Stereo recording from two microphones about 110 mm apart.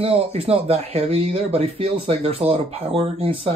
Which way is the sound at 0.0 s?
65° right (ahead or behind).